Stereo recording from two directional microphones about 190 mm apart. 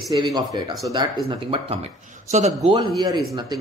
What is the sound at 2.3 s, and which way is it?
Speech, 35° right (ahead or behind).